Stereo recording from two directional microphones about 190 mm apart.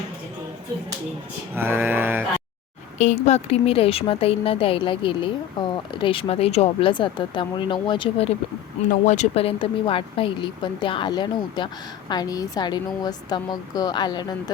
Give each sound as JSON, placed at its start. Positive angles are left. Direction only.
{"t": 1.5, "sound": "a sound", "side_deg": -10}
{"t": 3.0, "sound": "speech", "side_deg": 40}
{"t": 8.9, "sound": "speech", "side_deg": 35}